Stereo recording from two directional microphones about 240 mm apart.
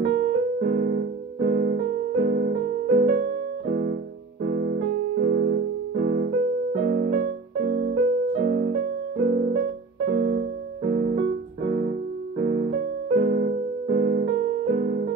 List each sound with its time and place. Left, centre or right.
0.0 s piano: right
4.5 s music: right